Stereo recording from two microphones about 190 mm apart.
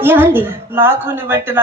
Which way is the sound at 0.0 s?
10° right (ahead or behind).